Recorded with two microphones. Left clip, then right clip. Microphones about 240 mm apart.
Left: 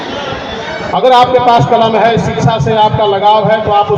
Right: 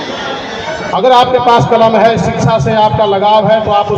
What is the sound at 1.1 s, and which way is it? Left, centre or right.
A man's voice, right.